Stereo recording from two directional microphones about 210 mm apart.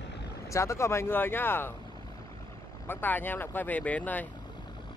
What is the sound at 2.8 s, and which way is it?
Speech, 10° left (ahead or behind).